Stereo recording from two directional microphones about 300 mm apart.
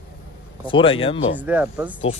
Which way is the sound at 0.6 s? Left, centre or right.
Centre.